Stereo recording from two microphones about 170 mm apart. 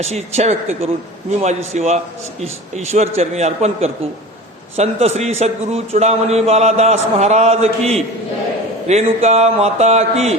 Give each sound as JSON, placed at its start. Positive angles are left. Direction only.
{"t": 0.0, "sound": "a man's voice", "side_deg": -40}